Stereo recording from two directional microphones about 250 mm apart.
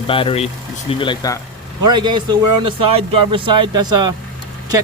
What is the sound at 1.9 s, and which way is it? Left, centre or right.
Speech, centre.